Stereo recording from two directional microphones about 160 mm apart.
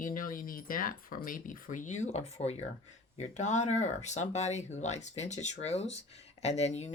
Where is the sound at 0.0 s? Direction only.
60° left (ahead or behind).